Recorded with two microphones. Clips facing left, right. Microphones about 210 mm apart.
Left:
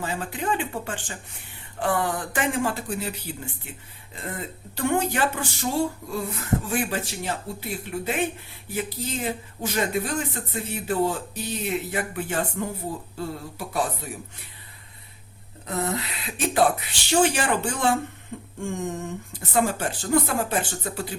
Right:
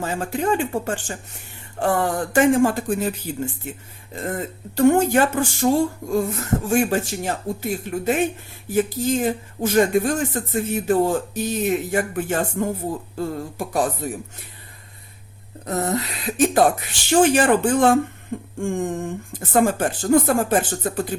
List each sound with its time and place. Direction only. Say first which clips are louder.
0.0 s speech: right 6 dB; 45° right (ahead or behind)
15.6 s speech: right 5 dB; 45° right (ahead or behind)